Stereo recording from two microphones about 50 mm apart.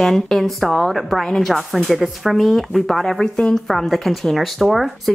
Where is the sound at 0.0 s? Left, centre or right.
Centre.